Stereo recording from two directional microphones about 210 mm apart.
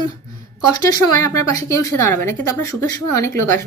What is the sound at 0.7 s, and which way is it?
A woman's voice, 15° left (ahead or behind).